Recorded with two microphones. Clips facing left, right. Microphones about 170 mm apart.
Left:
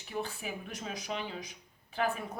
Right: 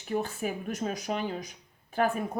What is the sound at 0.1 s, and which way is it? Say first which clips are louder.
Speech: right 7 dB; 45° right (ahead or behind).